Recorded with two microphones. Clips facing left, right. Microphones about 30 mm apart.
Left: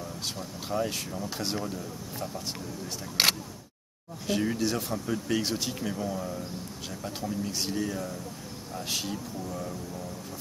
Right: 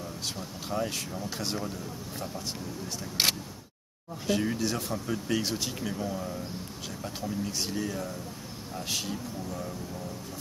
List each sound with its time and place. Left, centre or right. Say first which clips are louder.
0.7 s speech: left 1 dB; centre
4.3 s speech: left 1 dB; centre